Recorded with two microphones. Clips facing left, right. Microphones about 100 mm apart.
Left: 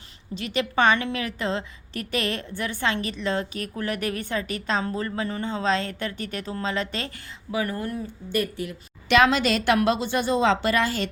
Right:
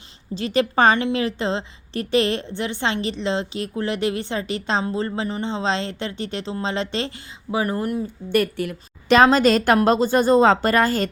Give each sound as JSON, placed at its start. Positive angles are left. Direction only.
{"t": 0.3, "sound": "a woman's voice", "side_deg": -35}
{"t": 8.3, "sound": "a woman's voice", "side_deg": -65}
{"t": 9.0, "sound": "a woman's voice", "side_deg": -35}